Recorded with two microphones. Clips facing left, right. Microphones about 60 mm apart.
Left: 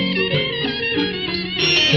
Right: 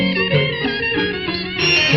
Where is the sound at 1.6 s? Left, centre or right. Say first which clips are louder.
Right 2 dB; right.